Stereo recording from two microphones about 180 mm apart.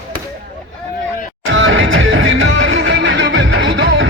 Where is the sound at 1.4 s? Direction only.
90° right.